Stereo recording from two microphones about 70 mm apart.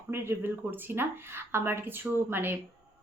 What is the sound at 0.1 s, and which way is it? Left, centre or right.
Speech, right.